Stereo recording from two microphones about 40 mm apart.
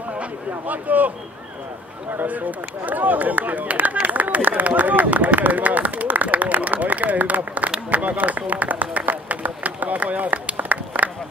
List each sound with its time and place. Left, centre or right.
0.2 s speech: right
2.2 s speech: right